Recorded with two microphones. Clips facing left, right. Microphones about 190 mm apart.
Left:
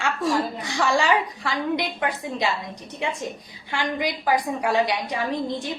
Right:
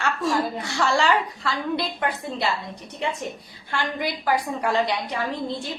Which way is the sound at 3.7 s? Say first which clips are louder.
Left 1 dB; 15° left (ahead or behind).